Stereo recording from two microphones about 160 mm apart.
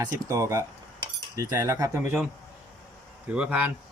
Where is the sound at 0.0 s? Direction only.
20° right (ahead or behind).